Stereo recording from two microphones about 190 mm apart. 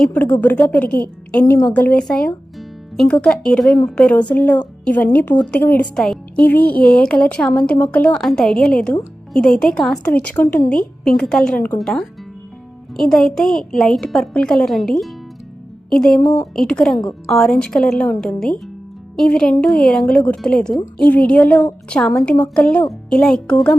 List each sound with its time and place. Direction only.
0.0 s a woman's voice: 10° left (ahead or behind)
16.2 s a woman's voice: 20° left (ahead or behind)
16.6 s a woman's voice: 5° left (ahead or behind)